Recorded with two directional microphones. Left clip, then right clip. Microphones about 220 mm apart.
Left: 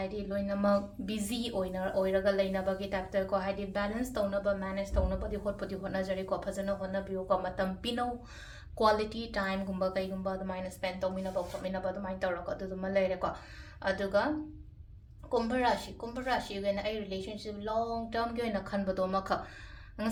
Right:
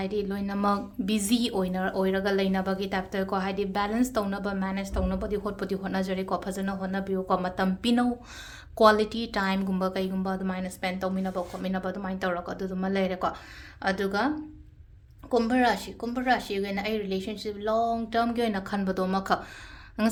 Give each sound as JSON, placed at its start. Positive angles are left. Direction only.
{"t": 0.0, "sound": "a woman's voice", "side_deg": -40}
{"t": 15.3, "sound": "a woman's voice", "side_deg": -45}